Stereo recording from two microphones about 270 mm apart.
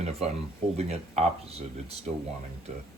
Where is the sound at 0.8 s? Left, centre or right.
Right.